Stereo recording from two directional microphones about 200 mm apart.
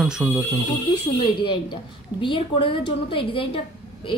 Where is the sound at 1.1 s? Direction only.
25° left (ahead or behind).